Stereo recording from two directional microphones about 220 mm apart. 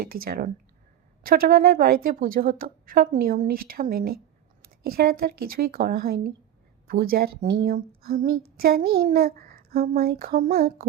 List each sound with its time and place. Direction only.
0.0 s a woman's voice: 40° right (ahead or behind)